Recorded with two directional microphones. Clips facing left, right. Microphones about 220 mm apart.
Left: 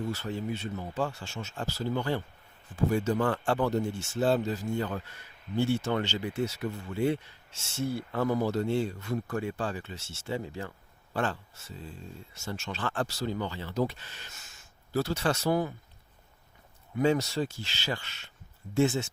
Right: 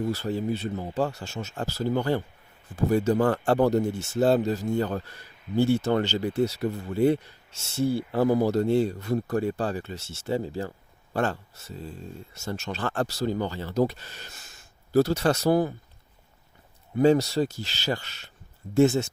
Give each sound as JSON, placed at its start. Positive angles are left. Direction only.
{"t": 0.0, "sound": "speech", "side_deg": -35}
{"t": 17.0, "sound": "speech", "side_deg": -35}